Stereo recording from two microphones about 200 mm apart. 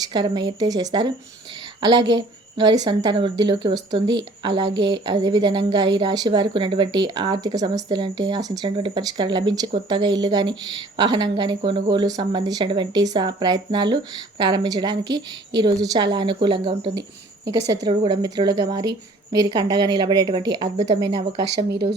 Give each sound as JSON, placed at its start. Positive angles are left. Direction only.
{"t": 0.1, "sound": "a woman's voice", "side_deg": -20}
{"t": 21.7, "sound": "speech", "side_deg": -55}